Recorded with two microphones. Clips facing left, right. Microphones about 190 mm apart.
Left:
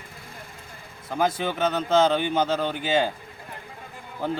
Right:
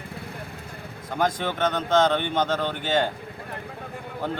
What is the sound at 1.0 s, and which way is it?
Speech, 5° left (ahead or behind).